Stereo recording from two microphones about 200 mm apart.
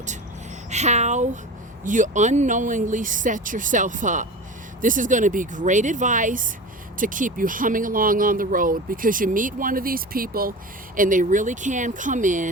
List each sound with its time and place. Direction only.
0.7 s speech: 35° right (ahead or behind)